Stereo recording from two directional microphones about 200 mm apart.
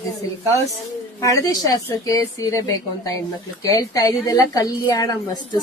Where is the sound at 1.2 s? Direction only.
15° left (ahead or behind).